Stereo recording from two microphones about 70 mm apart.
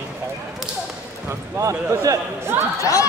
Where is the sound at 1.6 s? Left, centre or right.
Right.